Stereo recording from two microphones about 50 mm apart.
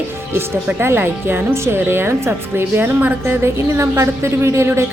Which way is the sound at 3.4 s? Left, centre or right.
Right.